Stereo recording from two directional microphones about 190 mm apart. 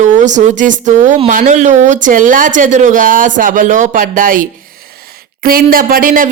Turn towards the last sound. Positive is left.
turn(degrees=-45)  # may be behind; listen again after turning